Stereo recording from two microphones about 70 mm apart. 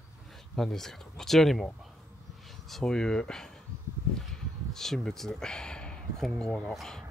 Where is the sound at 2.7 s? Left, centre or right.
Centre.